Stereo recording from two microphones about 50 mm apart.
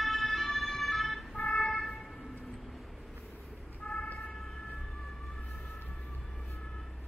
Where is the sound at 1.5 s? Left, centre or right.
Centre.